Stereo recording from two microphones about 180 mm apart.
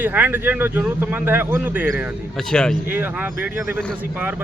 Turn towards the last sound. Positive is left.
turn(degrees=-10)  # may be behind; listen again after turning